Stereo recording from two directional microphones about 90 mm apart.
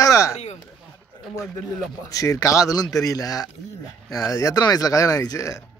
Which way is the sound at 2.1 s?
40° left (ahead or behind).